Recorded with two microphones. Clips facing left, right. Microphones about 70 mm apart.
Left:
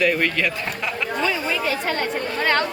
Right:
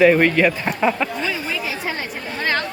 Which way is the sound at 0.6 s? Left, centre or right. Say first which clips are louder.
Right 7 dB; right.